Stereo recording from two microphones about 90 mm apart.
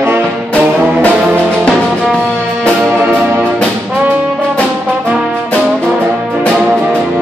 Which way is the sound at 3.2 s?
15° right (ahead or behind).